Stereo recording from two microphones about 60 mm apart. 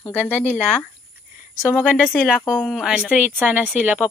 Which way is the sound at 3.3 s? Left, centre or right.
Right.